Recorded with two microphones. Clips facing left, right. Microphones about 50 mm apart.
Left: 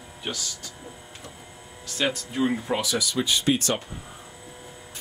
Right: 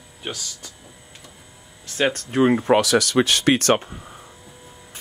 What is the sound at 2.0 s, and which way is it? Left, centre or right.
Speech, right.